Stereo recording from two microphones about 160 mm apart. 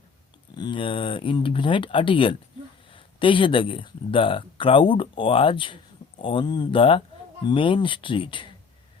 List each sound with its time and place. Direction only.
0.5 s speech: 30° left (ahead or behind)